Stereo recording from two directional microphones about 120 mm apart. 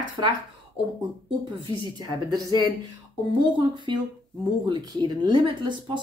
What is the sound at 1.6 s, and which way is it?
Speech, 35° right (ahead or behind).